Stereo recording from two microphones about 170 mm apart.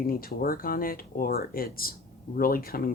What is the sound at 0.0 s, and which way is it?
Speech, 60° left (ahead or behind).